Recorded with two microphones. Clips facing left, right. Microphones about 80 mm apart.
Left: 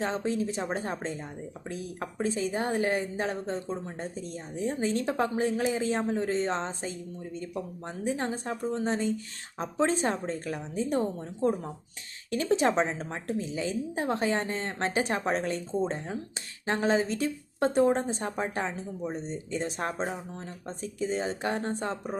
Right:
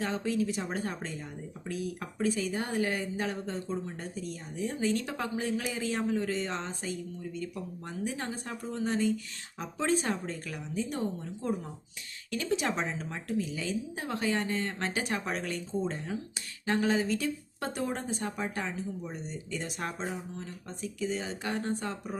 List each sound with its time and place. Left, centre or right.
0.0 s speech: left